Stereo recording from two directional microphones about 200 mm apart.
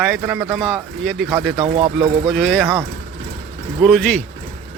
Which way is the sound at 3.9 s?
5° left (ahead or behind).